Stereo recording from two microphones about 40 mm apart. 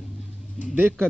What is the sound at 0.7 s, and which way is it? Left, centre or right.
Speech, right.